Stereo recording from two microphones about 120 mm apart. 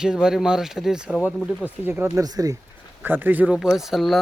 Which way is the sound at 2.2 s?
30° right (ahead or behind).